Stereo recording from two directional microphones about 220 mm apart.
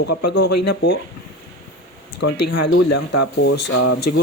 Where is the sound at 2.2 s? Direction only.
50° left (ahead or behind); by 3.9 s 90° left.